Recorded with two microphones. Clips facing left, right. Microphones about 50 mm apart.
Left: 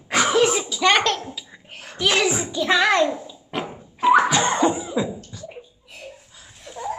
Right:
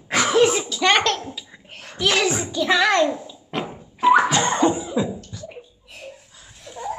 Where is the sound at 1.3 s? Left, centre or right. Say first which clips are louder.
Even; centre.